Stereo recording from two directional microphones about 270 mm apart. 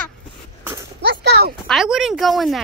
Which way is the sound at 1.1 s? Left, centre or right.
Right.